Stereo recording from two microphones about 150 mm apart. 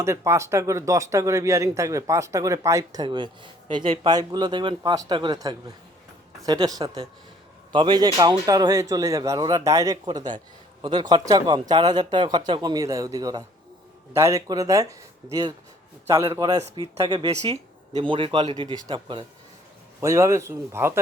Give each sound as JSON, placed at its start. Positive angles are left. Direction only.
{"t": 0.0, "sound": "a man's voice", "side_deg": -20}
{"t": 20.0, "sound": "speech", "side_deg": -20}